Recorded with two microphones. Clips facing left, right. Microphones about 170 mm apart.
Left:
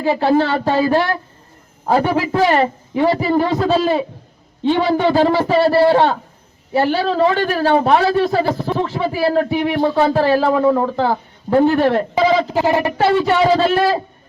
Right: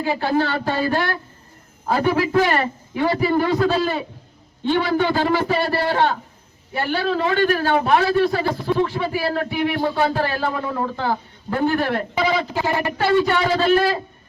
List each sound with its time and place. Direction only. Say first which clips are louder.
0.0 s a man's voice: left 5 dB; 30° left (ahead or behind)